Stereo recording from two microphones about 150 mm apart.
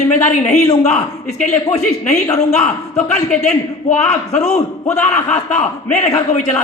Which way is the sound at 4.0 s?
20° left (ahead or behind).